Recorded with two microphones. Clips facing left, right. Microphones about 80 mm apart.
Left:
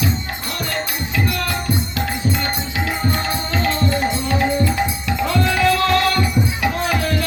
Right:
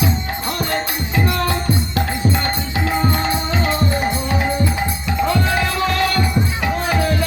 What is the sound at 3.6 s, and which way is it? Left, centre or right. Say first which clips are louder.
Music: left 2 dB; centre.